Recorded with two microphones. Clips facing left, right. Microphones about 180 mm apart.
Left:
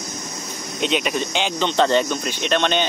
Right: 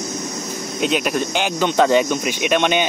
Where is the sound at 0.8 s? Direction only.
5° right (ahead or behind).